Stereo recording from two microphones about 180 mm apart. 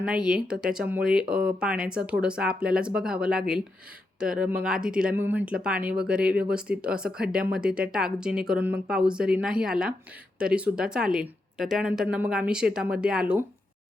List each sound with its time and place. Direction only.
0.0 s speech: 5° right (ahead or behind)